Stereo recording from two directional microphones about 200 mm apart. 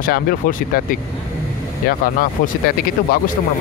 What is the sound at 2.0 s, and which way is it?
Speech, 45° left (ahead or behind).